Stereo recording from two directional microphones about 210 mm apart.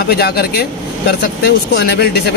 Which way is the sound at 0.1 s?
50° left (ahead or behind).